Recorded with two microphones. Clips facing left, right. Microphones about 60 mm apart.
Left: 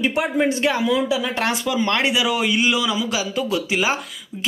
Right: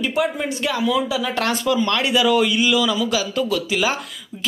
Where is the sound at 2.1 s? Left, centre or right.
Centre.